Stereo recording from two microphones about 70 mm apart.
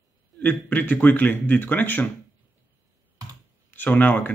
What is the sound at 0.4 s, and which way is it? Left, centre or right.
Speech, left.